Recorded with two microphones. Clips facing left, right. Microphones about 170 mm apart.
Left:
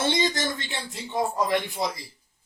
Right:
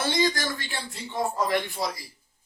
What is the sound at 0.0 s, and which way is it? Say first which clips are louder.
A man's voice: even; 25° left (ahead or behind).